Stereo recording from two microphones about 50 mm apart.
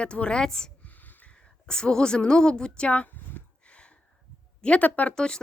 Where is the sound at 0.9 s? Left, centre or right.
Left.